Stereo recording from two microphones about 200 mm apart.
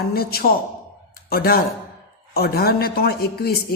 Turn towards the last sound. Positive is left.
turn(degrees=50)  # may be behind; listen again after turning